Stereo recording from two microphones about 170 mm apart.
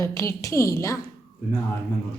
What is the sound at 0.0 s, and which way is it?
Speech, 15° left (ahead or behind).